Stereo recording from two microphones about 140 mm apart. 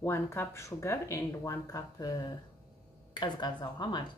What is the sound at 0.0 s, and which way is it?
Speech, 15° left (ahead or behind).